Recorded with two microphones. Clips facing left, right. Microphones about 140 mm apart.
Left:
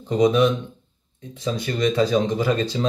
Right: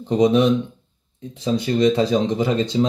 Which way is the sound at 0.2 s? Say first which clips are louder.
Right 2 dB; 25° right (ahead or behind).